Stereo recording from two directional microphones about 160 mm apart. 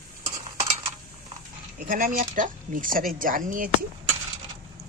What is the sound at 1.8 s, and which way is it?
Speech, 55° right (ahead or behind).